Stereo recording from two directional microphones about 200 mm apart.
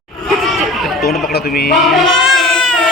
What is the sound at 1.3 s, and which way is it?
Speech, 55° left (ahead or behind).